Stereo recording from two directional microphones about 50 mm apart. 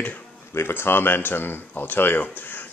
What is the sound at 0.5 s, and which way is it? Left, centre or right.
Speech, left.